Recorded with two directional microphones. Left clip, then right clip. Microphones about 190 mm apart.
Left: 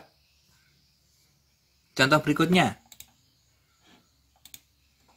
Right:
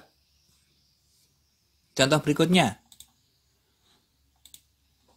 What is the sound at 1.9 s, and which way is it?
Speech, 25° right (ahead or behind).